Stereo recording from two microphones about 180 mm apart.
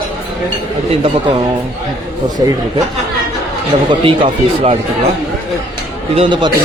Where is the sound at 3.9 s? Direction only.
25° right (ahead or behind).